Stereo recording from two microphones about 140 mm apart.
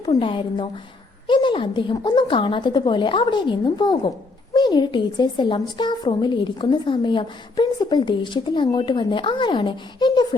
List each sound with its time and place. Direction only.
0.1 s a woman's voice: 35° left (ahead or behind)